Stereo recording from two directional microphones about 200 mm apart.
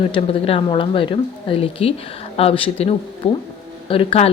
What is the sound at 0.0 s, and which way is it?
Speech, 30° left (ahead or behind).